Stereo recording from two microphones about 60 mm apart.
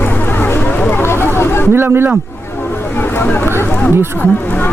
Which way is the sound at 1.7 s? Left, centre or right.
Right.